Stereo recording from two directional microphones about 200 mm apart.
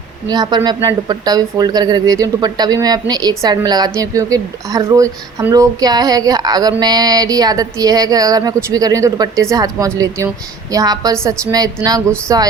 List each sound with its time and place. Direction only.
0.3 s a woman's voice: 20° right (ahead or behind)